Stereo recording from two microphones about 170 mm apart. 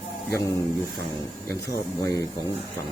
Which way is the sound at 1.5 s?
20° left (ahead or behind).